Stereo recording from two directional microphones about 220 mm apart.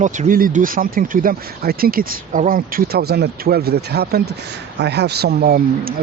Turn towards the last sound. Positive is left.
turn(degrees=-45)  # may be behind; listen again after turning